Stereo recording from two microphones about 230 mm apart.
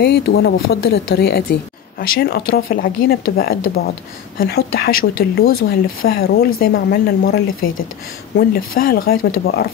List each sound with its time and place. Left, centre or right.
0.0 s speech: left